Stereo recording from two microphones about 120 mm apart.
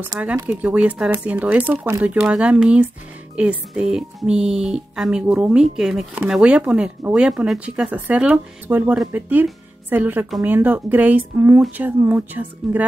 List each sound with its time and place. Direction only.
0.4 s speech: 15° right (ahead or behind)